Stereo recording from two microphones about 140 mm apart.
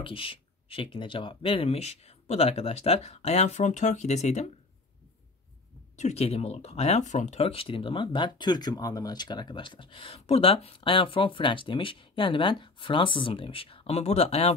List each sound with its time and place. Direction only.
0.0 s speech: 40° left (ahead or behind)
5.9 s speech: 50° left (ahead or behind)